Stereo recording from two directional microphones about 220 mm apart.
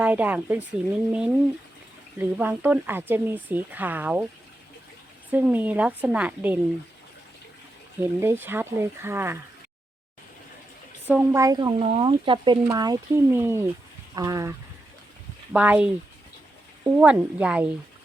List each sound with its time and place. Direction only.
0.0 s speech: 5° right (ahead or behind)
5.3 s speech: 10° right (ahead or behind)
8.0 s speech: 10° right (ahead or behind)
11.1 s speech: 10° right (ahead or behind)
11.8 s speech: 25° right (ahead or behind)
15.5 s speech: 5° right (ahead or behind)